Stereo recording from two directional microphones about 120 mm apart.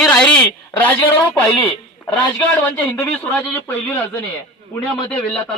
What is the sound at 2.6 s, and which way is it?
Speech, 20° left (ahead or behind).